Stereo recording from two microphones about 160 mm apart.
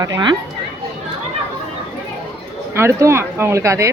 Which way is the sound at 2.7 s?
15° right (ahead or behind).